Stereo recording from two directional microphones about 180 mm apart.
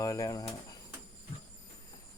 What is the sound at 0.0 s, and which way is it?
Speech, 20° left (ahead or behind).